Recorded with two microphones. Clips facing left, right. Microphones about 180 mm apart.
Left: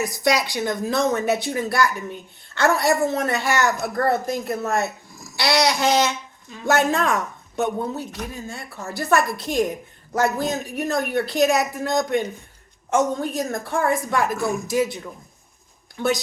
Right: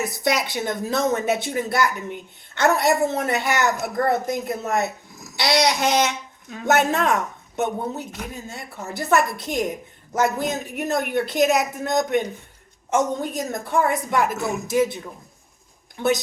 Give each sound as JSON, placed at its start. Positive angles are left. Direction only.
{"t": 0.0, "sound": "a woman's voice", "side_deg": -20}